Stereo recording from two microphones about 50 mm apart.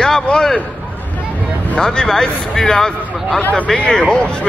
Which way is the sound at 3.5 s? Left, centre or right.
Left.